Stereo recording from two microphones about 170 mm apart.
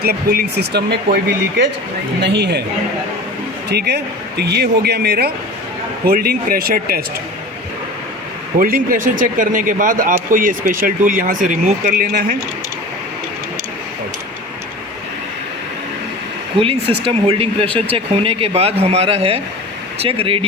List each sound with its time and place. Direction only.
0.0 s speech: 65° right (ahead or behind)
3.7 s speech: 75° right (ahead or behind); by 7.0 s 60° right (ahead or behind)
8.5 s speech: 55° right (ahead or behind)
16.6 s speech: 30° right (ahead or behind)